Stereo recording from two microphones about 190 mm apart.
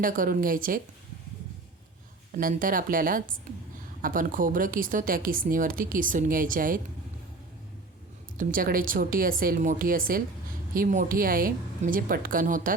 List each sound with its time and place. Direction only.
0.0 s a woman's voice: 45° right (ahead or behind)
2.3 s a woman's voice: 45° right (ahead or behind)
8.4 s a woman's voice: 45° right (ahead or behind)